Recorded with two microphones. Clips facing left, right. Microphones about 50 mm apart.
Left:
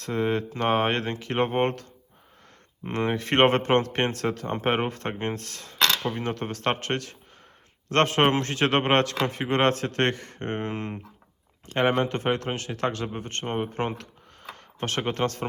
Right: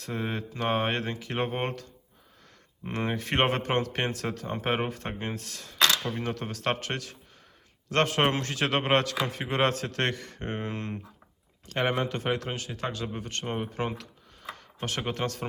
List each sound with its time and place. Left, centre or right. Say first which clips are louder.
0.0 s speech: left 7 dB; left
2.9 s speech: left 5 dB; left
11.7 s speech: left 4 dB; left
13.1 s speech: left 3 dB; left